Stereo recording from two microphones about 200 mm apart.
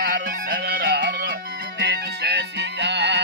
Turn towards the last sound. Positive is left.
turn(degrees=-60)  # may be behind; listen again after turning